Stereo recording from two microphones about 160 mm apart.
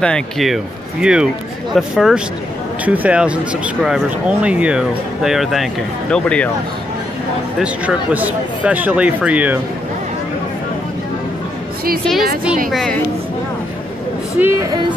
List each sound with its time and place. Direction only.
0.0 s speech: centre (ahead or behind)
7.5 s speech: 5° right (ahead or behind)
12.0 s speech: centre (ahead or behind)
14.4 s speech: 15° right (ahead or behind)